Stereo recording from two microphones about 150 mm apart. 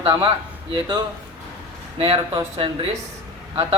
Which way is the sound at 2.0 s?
40° right (ahead or behind).